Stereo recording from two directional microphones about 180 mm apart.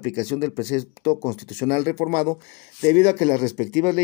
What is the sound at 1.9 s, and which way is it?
Speech, 40° right (ahead or behind).